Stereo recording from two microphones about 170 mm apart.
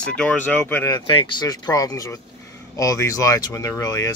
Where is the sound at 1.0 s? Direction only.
30° left (ahead or behind).